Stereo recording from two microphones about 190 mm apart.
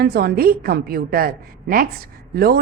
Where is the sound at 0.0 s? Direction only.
55° right (ahead or behind).